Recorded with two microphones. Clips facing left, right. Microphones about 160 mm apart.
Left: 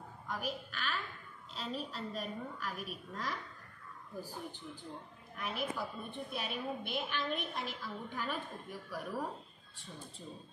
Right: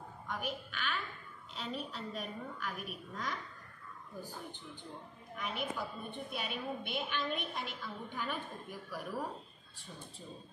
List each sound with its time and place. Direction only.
0.3 s a woman's voice: centre (ahead or behind)
5.4 s a woman's voice: centre (ahead or behind)